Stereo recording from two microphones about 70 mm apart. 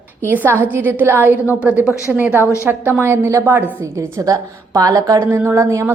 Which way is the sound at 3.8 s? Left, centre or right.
Right.